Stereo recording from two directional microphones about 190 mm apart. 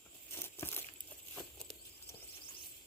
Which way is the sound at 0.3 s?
10° left (ahead or behind).